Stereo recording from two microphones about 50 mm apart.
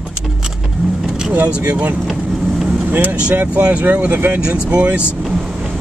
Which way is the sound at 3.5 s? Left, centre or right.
Right.